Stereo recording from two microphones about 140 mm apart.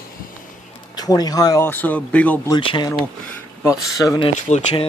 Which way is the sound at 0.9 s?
30° left (ahead or behind).